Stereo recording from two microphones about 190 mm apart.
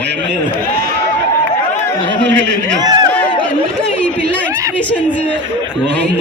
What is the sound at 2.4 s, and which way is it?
Speech, 70° right (ahead or behind).